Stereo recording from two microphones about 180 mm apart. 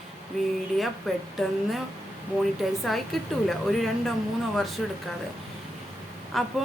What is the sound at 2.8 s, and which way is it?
A woman's voice, centre (ahead or behind).